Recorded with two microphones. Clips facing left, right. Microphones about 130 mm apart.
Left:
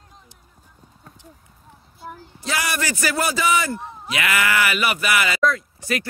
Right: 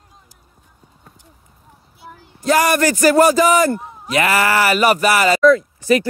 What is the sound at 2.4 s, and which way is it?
A man's voice, 45° right (ahead or behind).